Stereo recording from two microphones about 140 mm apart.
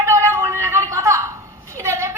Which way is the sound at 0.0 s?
20° right (ahead or behind).